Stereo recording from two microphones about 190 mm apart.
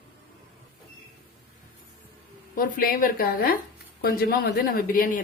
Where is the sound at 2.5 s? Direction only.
50° left (ahead or behind).